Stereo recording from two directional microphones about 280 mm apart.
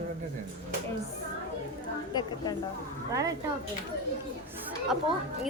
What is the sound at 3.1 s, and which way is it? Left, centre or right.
Speech, centre.